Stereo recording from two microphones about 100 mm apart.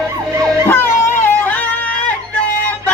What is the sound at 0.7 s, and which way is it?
Music, 25° left (ahead or behind).